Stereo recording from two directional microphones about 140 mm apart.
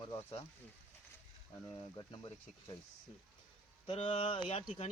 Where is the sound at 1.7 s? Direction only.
30° left (ahead or behind).